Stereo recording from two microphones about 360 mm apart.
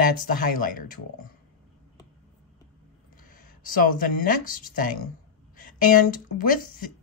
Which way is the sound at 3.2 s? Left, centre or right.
Left.